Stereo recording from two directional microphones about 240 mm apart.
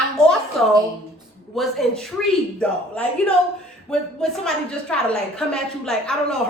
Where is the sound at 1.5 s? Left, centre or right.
Centre.